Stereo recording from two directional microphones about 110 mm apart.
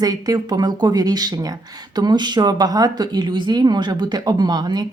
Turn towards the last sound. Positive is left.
turn(degrees=-40)  # may be behind; listen again after turning